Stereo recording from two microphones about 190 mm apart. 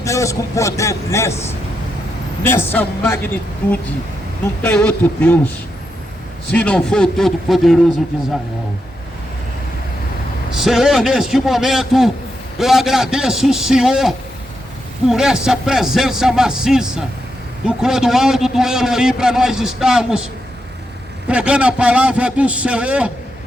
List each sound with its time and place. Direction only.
0.0 s a man's voice: 15° left (ahead or behind)
6.5 s a man's voice: 5° left (ahead or behind)
10.5 s a man's voice: centre (ahead or behind)
21.2 s a man's voice: 5° right (ahead or behind)